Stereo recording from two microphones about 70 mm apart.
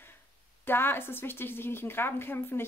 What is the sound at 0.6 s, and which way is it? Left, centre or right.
A woman's voice, left.